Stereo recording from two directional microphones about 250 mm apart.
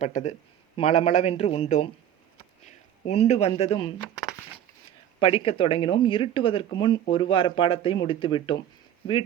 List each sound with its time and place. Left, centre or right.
0.0 s speech: left
4.9 s speech: left